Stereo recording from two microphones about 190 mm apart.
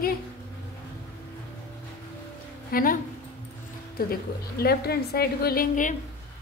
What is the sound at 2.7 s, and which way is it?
Speech, 50° left (ahead or behind).